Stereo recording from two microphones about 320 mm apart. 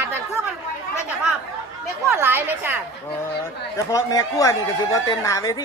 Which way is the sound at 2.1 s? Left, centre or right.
Centre.